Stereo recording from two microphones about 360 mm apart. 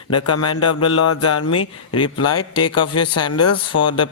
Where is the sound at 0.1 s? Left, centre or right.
Left.